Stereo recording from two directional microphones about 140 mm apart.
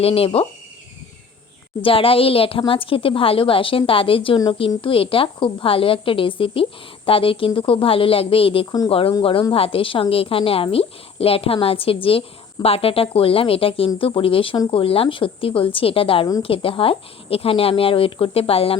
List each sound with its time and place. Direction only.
0.0 s speech: 45° left (ahead or behind)
1.8 s a woman's voice: 40° left (ahead or behind)